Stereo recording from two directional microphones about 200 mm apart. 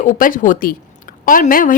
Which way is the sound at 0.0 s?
40° left (ahead or behind).